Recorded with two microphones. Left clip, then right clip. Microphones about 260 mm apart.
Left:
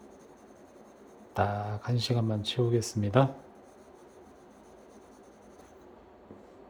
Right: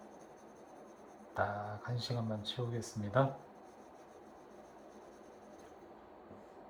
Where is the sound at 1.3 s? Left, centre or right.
Left.